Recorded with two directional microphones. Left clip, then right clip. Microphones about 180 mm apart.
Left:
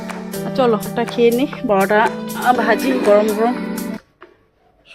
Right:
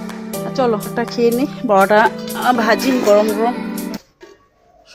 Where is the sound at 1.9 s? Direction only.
15° right (ahead or behind).